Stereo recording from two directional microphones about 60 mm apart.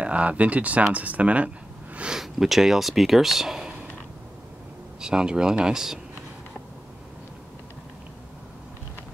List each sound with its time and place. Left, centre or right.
0.0 s speech: right
5.0 s speech: centre